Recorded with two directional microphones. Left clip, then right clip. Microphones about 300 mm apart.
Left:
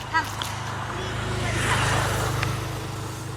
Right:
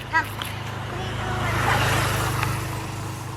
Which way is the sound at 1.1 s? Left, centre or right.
Centre.